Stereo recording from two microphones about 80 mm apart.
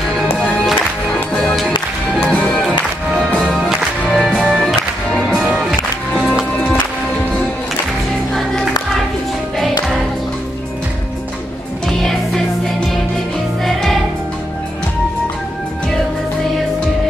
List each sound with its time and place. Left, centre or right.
0.4 s music: centre
4.1 s music: centre
13.7 s music: centre